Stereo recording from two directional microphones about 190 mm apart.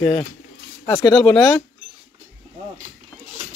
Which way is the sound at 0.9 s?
15° left (ahead or behind).